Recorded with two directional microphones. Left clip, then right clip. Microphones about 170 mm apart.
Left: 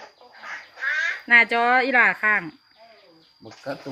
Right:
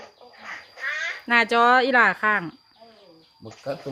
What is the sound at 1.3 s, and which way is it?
Speech, 15° right (ahead or behind).